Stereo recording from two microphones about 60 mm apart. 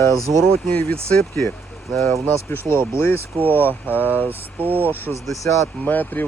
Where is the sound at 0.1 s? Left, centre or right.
Right.